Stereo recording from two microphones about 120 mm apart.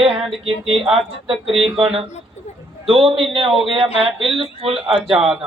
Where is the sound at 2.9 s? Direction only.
50° right (ahead or behind).